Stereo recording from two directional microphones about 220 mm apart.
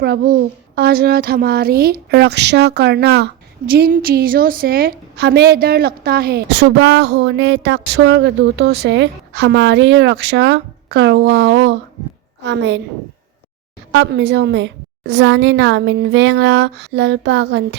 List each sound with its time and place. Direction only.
0.0 s a woman's voice: 45° right (ahead or behind)
13.9 s a woman's voice: 50° right (ahead or behind)